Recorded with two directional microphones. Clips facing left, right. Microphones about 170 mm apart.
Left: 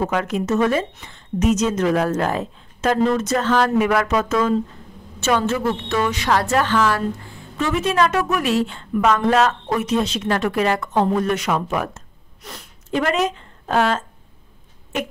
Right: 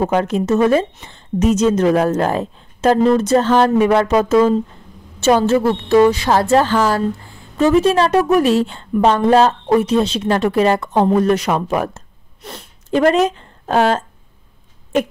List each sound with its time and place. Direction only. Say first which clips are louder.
0.0 s a woman's voice: right 5 dB; 30° right (ahead or behind)